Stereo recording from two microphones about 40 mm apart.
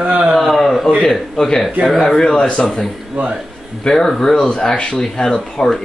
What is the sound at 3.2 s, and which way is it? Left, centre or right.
Speech, right.